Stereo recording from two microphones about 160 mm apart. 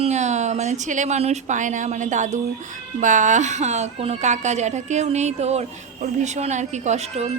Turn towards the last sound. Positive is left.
turn(degrees=-45)  # may be behind; listen again after turning